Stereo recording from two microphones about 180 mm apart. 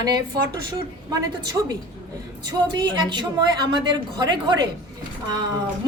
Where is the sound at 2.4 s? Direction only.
25° right (ahead or behind).